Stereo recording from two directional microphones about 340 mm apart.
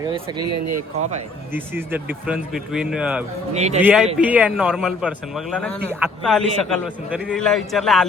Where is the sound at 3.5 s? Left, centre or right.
Centre.